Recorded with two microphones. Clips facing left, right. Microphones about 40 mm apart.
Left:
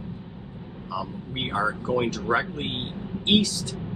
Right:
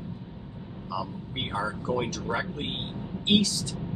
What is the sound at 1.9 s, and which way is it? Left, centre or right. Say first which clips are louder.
Speech: left 4 dB; centre.